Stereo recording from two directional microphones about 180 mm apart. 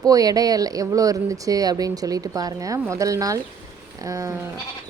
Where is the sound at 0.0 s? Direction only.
20° right (ahead or behind).